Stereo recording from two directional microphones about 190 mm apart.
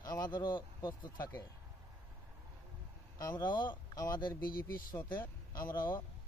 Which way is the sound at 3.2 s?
20° left (ahead or behind).